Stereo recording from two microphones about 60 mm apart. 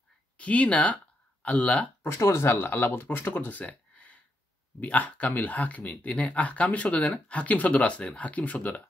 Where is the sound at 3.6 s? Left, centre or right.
Left.